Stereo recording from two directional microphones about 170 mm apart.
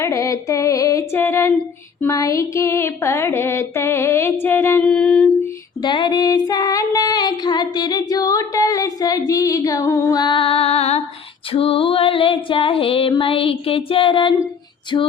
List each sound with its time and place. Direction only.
0.0 s music: 20° left (ahead or behind)
5.8 s female singing: 25° left (ahead or behind)
11.5 s music: 35° left (ahead or behind)
14.9 s female singing: 25° left (ahead or behind)